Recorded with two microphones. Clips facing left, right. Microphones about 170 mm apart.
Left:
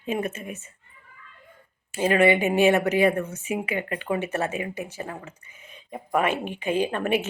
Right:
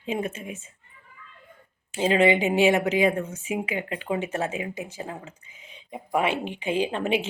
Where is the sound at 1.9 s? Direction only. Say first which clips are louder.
Left 1 dB; 20° right (ahead or behind).